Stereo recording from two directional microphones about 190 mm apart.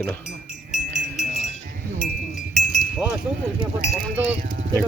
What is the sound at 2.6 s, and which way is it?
Wind chime, 5° right (ahead or behind).